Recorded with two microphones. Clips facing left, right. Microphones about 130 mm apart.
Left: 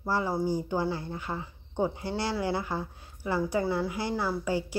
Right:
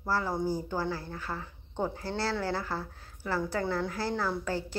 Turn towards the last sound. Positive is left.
turn(degrees=10)  # may be behind; listen again after turning